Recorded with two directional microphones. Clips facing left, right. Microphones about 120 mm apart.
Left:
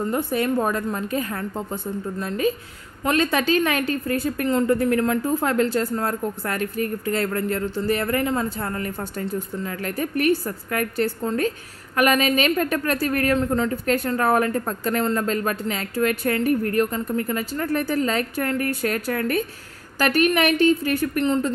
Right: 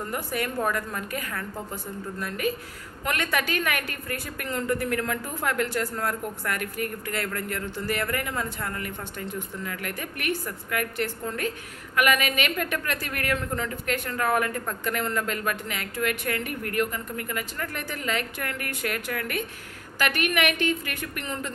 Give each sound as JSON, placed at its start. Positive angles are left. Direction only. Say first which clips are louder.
{"t": 0.1, "sound": "a woman's voice", "louder": "left 7 dB", "side_deg": 25}